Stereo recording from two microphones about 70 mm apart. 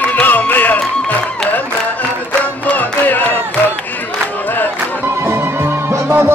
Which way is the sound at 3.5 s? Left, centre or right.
Left.